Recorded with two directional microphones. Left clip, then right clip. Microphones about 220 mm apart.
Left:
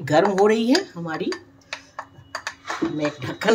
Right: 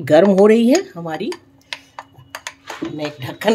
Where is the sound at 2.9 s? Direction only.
70° right (ahead or behind).